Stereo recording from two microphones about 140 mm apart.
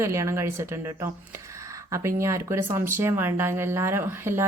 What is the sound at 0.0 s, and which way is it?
A woman's voice, 20° right (ahead or behind).